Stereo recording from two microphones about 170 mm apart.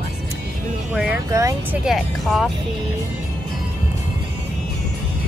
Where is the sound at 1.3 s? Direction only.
15° right (ahead or behind).